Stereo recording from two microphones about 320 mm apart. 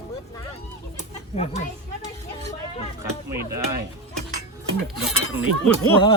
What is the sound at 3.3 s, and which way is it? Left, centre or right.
Speech, centre.